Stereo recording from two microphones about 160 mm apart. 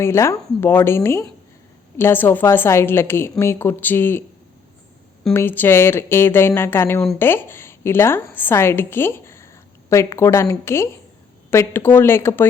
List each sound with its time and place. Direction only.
0.0 s a woman's voice: 15° left (ahead or behind)
5.3 s a woman's voice: 15° left (ahead or behind)